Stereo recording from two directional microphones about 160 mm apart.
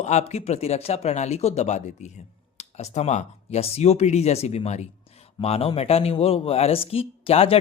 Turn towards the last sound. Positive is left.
turn(degrees=35)  # may be behind; listen again after turning